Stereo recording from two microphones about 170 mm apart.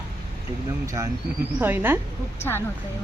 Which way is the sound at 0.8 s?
15° right (ahead or behind).